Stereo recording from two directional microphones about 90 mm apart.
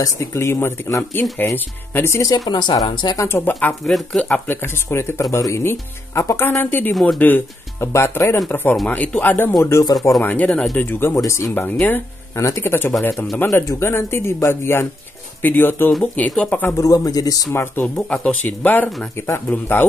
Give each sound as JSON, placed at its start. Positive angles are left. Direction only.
{"t": 0.0, "sound": "speech", "side_deg": 35}
{"t": 2.3, "sound": "speech", "side_deg": 50}
{"t": 3.2, "sound": "speech", "side_deg": 25}
{"t": 3.8, "sound": "speech", "side_deg": 5}
{"t": 4.5, "sound": "speech", "side_deg": 25}
{"t": 7.9, "sound": "speech", "side_deg": 30}
{"t": 9.6, "sound": "speech", "side_deg": 35}
{"t": 10.2, "sound": "speech", "side_deg": 15}
{"t": 10.8, "sound": "speech", "side_deg": 25}
{"t": 16.7, "sound": "speech", "side_deg": 40}
{"t": 17.5, "sound": "speech", "side_deg": 30}
{"t": 17.9, "sound": "speech", "side_deg": 10}